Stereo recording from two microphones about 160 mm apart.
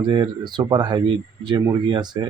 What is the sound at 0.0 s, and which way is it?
Speech, 25° right (ahead or behind).